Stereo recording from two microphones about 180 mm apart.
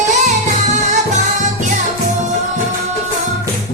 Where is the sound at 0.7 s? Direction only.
40° right (ahead or behind).